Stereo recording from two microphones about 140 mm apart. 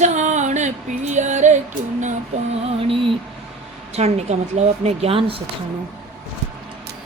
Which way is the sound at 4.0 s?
50° right (ahead or behind).